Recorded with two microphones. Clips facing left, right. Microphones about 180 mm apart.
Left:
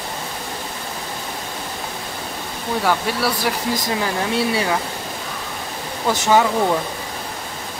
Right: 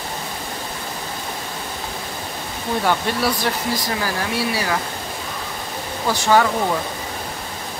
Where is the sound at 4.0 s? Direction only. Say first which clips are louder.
Left 2 dB; 25° left (ahead or behind).